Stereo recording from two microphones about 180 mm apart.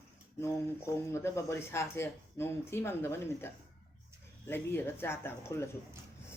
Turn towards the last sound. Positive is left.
turn(degrees=15)  # may be behind; listen again after turning